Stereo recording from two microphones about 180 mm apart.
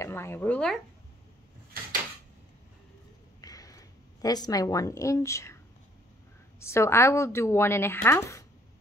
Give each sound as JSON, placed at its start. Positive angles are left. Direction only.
{"t": 0.0, "sound": "a woman's voice", "side_deg": 15}
{"t": 3.3, "sound": "a sound", "side_deg": 20}
{"t": 6.6, "sound": "a woman's voice", "side_deg": 15}